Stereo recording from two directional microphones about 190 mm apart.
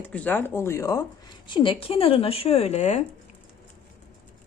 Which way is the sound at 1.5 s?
25° left (ahead or behind).